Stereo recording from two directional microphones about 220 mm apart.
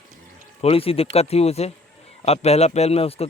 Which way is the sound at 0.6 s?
25° left (ahead or behind).